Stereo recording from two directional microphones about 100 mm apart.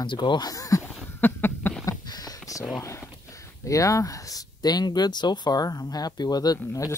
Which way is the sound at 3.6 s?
35° left (ahead or behind).